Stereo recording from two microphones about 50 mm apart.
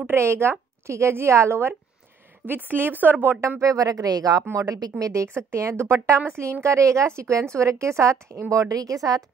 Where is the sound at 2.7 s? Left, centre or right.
Right.